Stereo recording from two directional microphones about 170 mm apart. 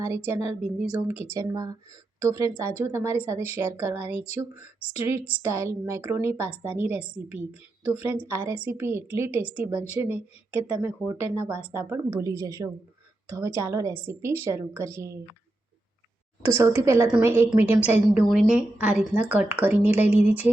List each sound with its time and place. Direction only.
0.0 s a woman's voice: 15° right (ahead or behind)
1.3 s a woman's voice: 20° right (ahead or behind)
16.4 s a woman's voice: 15° right (ahead or behind)